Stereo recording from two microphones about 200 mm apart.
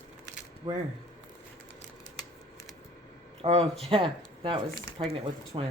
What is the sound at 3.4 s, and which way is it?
Speech, 30° right (ahead or behind).